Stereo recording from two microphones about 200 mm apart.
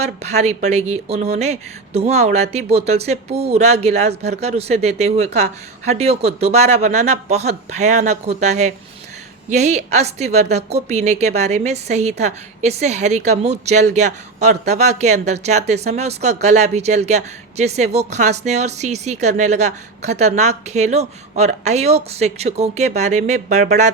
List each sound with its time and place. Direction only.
0.0 s speech: 35° right (ahead or behind)